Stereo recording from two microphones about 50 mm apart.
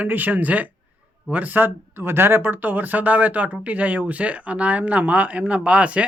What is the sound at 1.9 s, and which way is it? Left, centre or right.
Speech, right.